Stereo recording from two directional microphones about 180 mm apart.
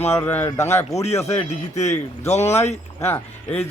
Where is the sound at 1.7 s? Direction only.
40° left (ahead or behind).